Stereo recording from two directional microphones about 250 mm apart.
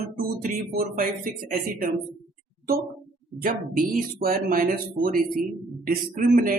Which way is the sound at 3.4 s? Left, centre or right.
Right.